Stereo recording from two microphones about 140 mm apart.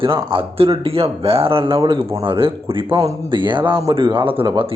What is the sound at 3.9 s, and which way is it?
Speech, 40° right (ahead or behind).